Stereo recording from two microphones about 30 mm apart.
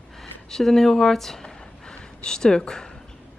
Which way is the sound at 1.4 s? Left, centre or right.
Left.